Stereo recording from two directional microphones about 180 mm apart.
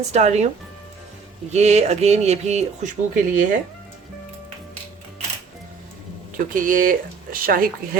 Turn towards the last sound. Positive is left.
turn(degrees=-50)  # may be behind; listen again after turning